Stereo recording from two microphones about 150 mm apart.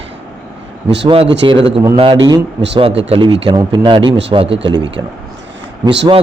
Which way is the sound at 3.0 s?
40° right (ahead or behind).